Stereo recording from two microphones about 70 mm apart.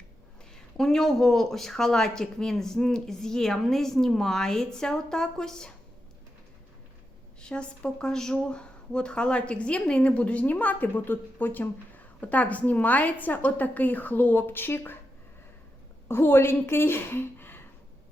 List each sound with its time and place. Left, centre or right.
0.5 s speech: centre
7.4 s speech: centre; by 14.9 s left
16.0 s a woman's voice: left